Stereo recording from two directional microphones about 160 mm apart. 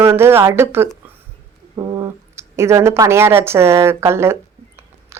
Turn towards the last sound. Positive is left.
turn(degrees=-15)  # may be behind; listen again after turning